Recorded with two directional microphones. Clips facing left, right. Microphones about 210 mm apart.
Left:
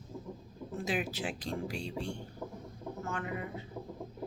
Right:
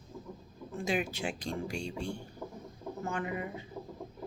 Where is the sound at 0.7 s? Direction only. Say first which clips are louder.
Right 2 dB; 5° left (ahead or behind).